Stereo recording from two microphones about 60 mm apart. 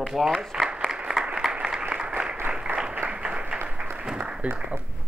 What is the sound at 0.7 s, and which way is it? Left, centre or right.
Applause, centre.